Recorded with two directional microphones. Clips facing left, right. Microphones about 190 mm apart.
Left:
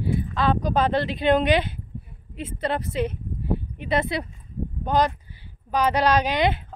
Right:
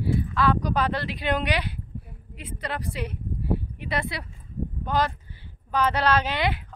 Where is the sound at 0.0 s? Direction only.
20° left (ahead or behind).